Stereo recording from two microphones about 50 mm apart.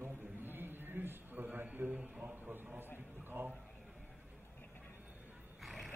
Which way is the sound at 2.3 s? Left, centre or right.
Right.